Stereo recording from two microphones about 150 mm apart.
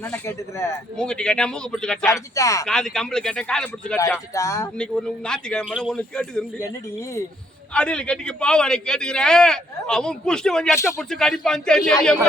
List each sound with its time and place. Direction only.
0.3 s speech: 20° left (ahead or behind)
0.9 s a man's voice: 5° left (ahead or behind)
2.3 s speech: 20° left (ahead or behind)
2.6 s a man's voice: 5° left (ahead or behind)
4.4 s speech: 20° left (ahead or behind)
4.8 s a man's voice: 5° left (ahead or behind)
7.7 s a man's voice: 5° left (ahead or behind)
10.8 s speech: 20° left (ahead or behind)
11.1 s a man's voice: 5° left (ahead or behind)